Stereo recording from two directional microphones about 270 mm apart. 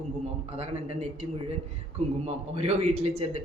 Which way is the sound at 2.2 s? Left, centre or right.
Right.